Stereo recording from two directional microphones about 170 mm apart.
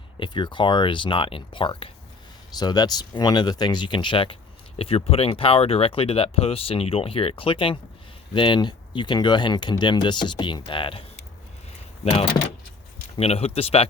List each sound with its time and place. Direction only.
0.2 s speech: 30° left (ahead or behind)
12.0 s speech: 30° left (ahead or behind)